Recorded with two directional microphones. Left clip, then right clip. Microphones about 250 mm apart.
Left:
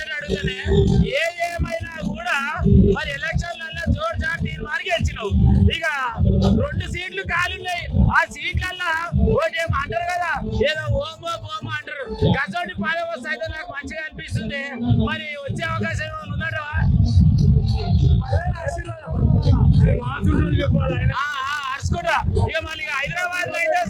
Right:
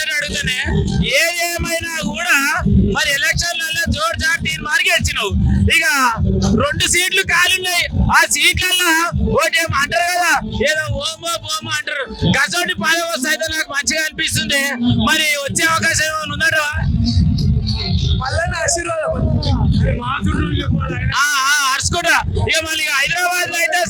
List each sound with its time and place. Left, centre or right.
1.1 s music: right
2.2 s a man's voice: right
5.9 s a man's voice: right
10.6 s a man's voice: right
12.3 s a man's voice: right
13.9 s music: right
21.2 s a sound: right